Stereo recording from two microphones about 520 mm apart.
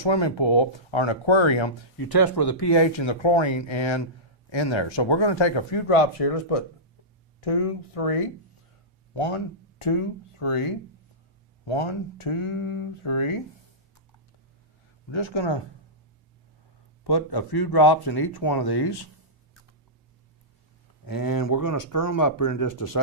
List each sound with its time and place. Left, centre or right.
0.0 s speech: left
2.0 s speech: left
9.2 s speech: left
11.6 s speech: left
15.1 s speech: left
17.0 s speech: left
21.0 s speech: left